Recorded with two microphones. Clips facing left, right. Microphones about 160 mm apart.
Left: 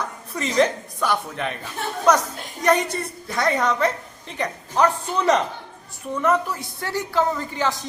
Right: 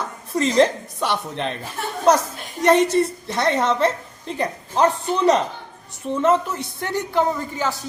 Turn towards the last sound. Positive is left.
turn(degrees=-10)  # may be behind; listen again after turning